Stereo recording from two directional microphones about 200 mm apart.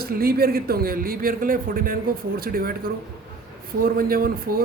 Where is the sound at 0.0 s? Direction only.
50° right (ahead or behind).